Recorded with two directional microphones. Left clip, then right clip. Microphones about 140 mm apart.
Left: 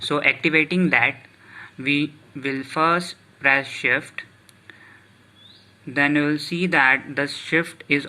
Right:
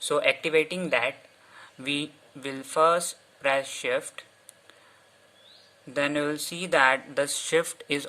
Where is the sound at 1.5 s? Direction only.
45° right (ahead or behind).